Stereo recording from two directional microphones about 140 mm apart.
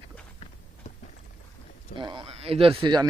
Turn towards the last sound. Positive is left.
turn(degrees=-30)  # may be behind; listen again after turning